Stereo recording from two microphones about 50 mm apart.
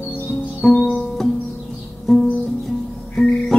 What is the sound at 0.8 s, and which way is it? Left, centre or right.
Music, centre.